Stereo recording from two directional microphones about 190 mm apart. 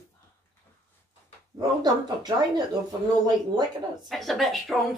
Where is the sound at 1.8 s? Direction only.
20° right (ahead or behind).